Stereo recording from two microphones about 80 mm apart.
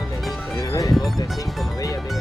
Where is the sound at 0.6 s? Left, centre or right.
Left.